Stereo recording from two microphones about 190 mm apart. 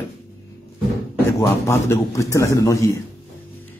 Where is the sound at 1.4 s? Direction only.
15° left (ahead or behind).